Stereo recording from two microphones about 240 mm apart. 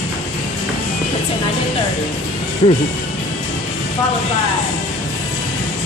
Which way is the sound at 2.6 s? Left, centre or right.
Left.